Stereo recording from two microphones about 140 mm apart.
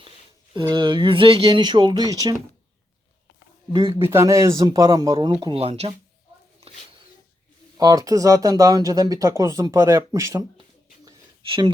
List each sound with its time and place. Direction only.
0.5 s speech: 35° right (ahead or behind)
3.7 s speech: 40° right (ahead or behind)
3.9 s speech: 20° right (ahead or behind)
5.5 s speech: 45° right (ahead or behind)
7.8 s speech: 30° right (ahead or behind)
11.4 s speech: 40° right (ahead or behind)